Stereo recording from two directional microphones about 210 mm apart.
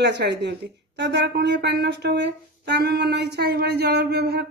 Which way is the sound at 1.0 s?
50° right (ahead or behind).